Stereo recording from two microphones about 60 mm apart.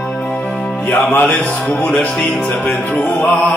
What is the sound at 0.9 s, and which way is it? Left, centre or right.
Music, left.